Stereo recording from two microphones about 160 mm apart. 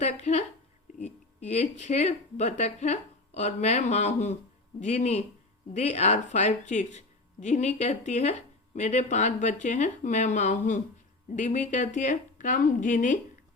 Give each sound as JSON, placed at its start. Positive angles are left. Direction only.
{"t": 0.0, "sound": "a woman's voice", "side_deg": 45}
{"t": 1.5, "sound": "a woman's voice", "side_deg": 45}